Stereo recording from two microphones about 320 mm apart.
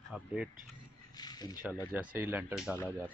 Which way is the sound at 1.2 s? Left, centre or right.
Centre.